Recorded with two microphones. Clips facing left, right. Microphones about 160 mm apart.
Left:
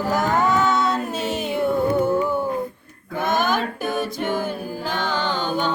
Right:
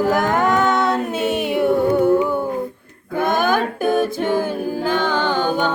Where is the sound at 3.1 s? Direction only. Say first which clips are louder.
Right 4 dB; 50° right (ahead or behind).